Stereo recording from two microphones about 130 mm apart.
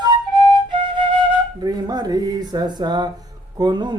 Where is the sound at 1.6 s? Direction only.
30° right (ahead or behind).